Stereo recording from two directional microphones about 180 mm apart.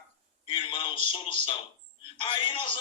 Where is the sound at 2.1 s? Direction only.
30° left (ahead or behind).